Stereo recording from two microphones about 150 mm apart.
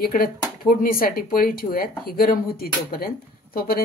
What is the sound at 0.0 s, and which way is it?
Speech, 80° left.